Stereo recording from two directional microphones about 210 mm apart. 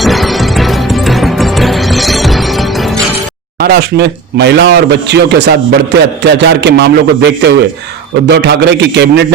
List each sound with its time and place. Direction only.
0.0 s music: centre (ahead or behind)
3.6 s a man's voice: 50° right (ahead or behind)